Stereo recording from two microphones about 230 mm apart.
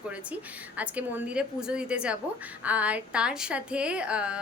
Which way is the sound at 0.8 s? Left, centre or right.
Centre.